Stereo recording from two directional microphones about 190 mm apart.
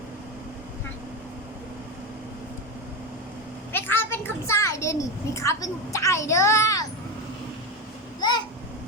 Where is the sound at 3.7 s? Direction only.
10° left (ahead or behind).